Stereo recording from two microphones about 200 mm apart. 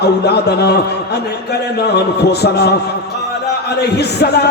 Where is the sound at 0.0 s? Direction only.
55° left (ahead or behind).